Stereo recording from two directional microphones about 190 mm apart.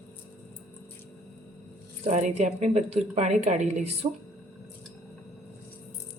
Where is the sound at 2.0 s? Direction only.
35° right (ahead or behind).